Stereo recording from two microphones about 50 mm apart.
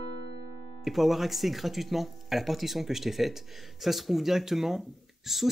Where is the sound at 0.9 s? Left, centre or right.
Centre.